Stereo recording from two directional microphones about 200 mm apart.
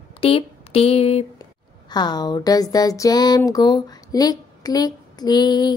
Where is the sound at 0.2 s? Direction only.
30° left (ahead or behind).